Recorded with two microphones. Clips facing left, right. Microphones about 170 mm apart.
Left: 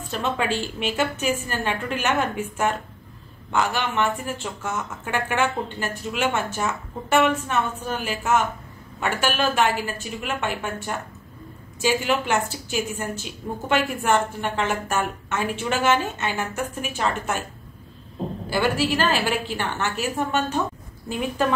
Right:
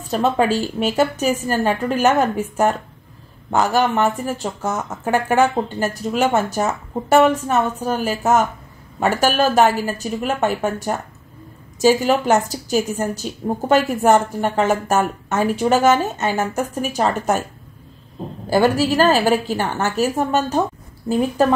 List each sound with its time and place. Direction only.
0.1 s a woman's voice: 40° right (ahead or behind)
18.5 s a woman's voice: 40° right (ahead or behind)